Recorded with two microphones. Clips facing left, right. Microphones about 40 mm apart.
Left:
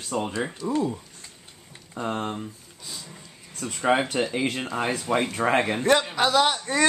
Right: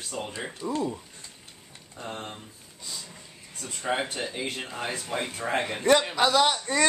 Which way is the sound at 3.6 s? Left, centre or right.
Left.